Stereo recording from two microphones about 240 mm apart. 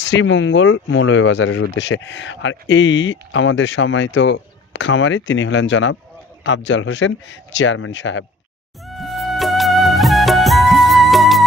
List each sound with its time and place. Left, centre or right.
0.0 s speech: left
8.8 s music: centre